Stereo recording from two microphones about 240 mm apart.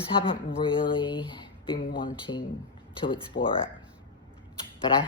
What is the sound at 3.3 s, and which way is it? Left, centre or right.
Speech, left.